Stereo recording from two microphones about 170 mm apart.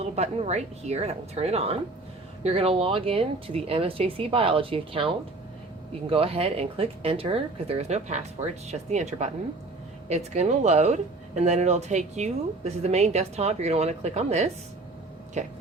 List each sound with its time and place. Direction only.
0.0 s speech: 40° right (ahead or behind)